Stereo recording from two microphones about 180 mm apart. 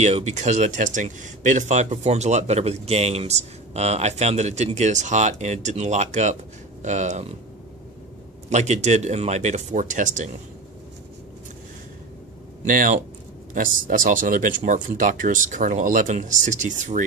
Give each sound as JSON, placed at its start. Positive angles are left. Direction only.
{"t": 0.0, "sound": "speech", "side_deg": -40}
{"t": 8.5, "sound": "speech", "side_deg": -40}
{"t": 12.6, "sound": "speech", "side_deg": -50}